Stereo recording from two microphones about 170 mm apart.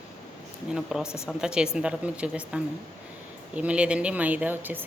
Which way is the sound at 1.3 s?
5° right (ahead or behind).